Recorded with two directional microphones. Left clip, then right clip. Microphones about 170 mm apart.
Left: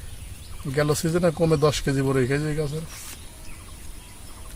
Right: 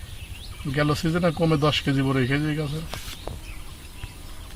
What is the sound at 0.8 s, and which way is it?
A man's voice, 45° left (ahead or behind).